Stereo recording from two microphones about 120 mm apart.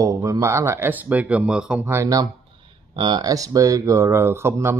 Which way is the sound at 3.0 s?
35° right (ahead or behind).